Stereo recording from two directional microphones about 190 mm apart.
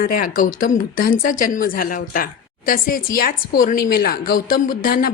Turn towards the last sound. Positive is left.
turn(degrees=50)  # may be behind; listen again after turning